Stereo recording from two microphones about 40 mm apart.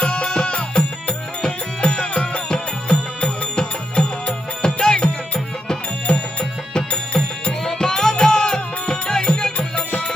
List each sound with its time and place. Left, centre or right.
0.1 s music: left